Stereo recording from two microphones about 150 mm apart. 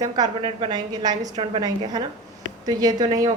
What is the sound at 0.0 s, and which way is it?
A woman's voice, 30° right (ahead or behind).